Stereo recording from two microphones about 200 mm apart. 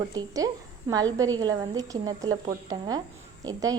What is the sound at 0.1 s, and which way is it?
A woman's voice, 20° right (ahead or behind).